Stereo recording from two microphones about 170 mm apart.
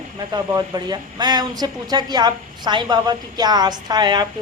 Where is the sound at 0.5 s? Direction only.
25° right (ahead or behind).